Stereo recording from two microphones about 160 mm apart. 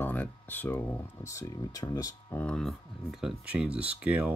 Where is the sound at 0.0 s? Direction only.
10° left (ahead or behind).